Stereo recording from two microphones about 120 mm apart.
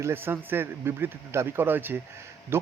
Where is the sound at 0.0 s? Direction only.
20° right (ahead or behind).